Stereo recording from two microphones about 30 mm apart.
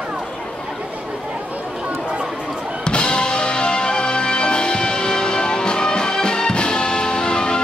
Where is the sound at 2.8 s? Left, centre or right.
Left.